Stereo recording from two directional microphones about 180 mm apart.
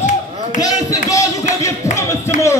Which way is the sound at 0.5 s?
20° left (ahead or behind).